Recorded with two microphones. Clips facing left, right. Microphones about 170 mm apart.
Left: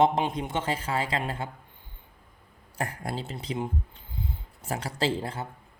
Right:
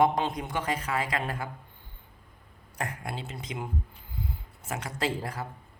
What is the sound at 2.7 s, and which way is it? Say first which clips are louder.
Speech: left 3 dB; 30° left (ahead or behind).